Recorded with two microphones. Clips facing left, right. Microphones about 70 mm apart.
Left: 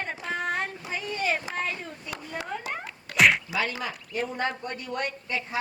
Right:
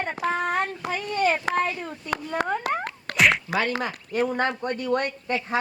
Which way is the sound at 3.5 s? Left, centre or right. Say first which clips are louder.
Right 4 dB; right.